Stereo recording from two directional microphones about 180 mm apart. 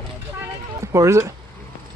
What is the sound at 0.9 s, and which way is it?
Speech, 15° right (ahead or behind).